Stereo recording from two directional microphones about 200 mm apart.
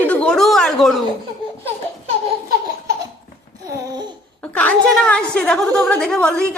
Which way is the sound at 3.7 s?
15° right (ahead or behind).